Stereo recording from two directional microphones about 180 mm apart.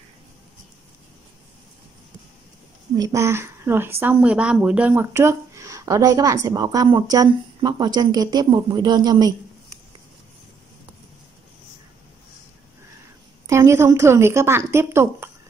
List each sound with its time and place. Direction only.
3.0 s a woman's voice: 15° right (ahead or behind)
13.5 s a woman's voice: 15° right (ahead or behind)